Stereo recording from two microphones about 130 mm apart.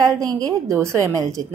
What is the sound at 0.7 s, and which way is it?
Speech, 20° right (ahead or behind).